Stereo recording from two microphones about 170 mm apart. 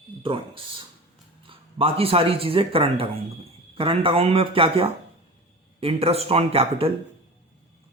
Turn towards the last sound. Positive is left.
turn(degrees=-35)  # may be behind; listen again after turning